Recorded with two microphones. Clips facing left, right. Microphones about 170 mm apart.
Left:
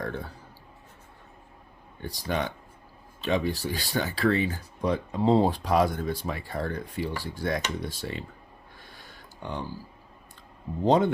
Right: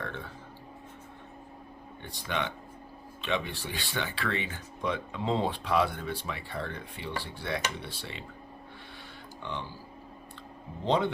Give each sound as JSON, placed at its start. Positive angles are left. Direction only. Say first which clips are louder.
{"t": 0.0, "sound": "a sound", "louder": "left 5 dB", "side_deg": 40}
{"t": 2.0, "sound": "speech", "louder": "left 4 dB", "side_deg": 40}
{"t": 9.4, "sound": "speech", "louder": "left 4 dB", "side_deg": 45}
{"t": 10.8, "sound": "speech", "louder": "left 5 dB", "side_deg": 45}